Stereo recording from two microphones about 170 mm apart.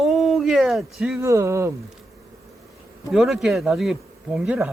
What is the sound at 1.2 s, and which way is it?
Speech, 15° right (ahead or behind).